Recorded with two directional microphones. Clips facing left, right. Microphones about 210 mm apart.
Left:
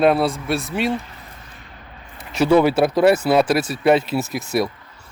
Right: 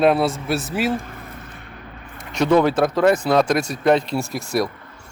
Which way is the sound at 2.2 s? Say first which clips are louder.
Left 1 dB; 5° left (ahead or behind).